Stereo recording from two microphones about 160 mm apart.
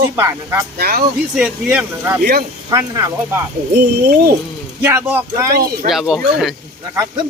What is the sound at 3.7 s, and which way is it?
Speech, 80° right.